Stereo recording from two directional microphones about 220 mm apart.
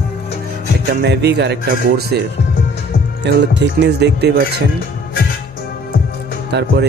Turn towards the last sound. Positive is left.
turn(degrees=-50)  # may be behind; listen again after turning